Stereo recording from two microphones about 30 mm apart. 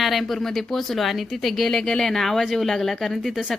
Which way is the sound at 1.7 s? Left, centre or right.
Centre.